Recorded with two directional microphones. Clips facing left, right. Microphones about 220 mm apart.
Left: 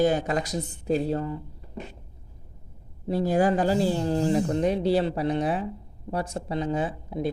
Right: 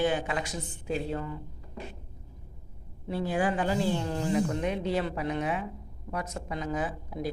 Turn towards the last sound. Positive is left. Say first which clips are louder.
# left 5 dB
turn(degrees=25)  # may be behind; listen again after turning